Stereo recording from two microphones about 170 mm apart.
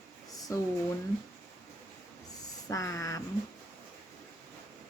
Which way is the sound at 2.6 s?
20° left (ahead or behind).